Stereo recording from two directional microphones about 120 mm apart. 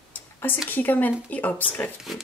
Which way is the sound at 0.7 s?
15° left (ahead or behind).